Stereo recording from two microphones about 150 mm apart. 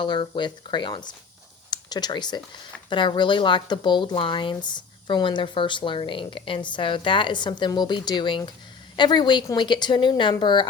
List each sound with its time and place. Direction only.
0.0 s speech: 30° left (ahead or behind)